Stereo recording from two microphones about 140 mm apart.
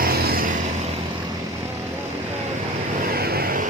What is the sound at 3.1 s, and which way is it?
Vehicle, 90° right.